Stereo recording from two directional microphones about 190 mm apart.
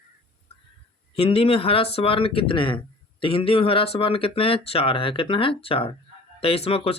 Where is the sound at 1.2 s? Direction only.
30° left (ahead or behind).